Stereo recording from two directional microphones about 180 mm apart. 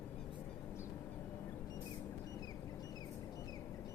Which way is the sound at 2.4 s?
20° left (ahead or behind).